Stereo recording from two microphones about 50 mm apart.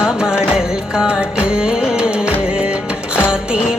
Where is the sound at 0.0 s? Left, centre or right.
Centre.